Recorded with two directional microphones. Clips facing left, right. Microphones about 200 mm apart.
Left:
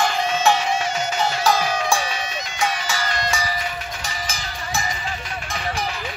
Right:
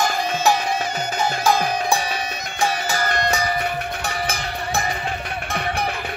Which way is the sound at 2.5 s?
55° right (ahead or behind).